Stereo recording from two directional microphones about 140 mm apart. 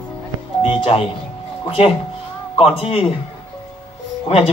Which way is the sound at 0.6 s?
40° left (ahead or behind).